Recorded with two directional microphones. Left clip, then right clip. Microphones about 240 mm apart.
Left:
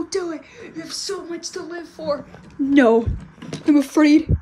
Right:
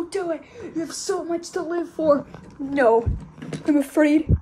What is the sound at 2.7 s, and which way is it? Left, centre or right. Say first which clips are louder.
Speech: left 2 dB; left.